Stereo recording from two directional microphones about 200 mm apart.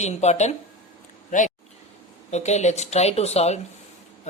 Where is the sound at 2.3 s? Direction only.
35° left (ahead or behind).